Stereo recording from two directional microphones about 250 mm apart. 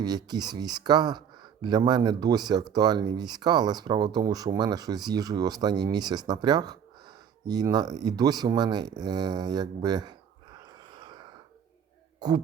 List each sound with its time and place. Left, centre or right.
0.0 s speech: centre